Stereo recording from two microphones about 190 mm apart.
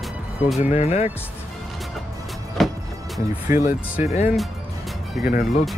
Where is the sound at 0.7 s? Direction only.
35° left (ahead or behind).